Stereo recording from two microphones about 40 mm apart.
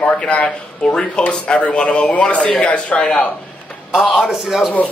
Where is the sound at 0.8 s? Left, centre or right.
Centre.